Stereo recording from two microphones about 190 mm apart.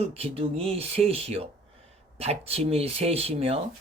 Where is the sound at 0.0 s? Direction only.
30° right (ahead or behind).